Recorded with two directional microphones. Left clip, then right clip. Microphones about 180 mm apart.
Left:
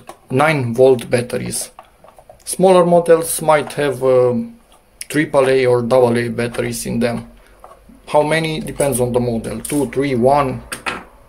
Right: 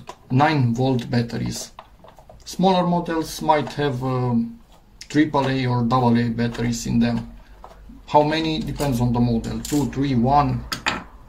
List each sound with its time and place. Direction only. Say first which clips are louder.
0.3 s speech: left 4 dB; 50° left (ahead or behind)
2.5 s speech: left 9 dB; 45° left (ahead or behind)
8.1 s speech: left 3 dB; 55° left (ahead or behind)